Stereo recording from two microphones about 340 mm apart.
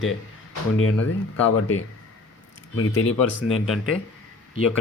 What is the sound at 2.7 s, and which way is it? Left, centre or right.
Speech, left.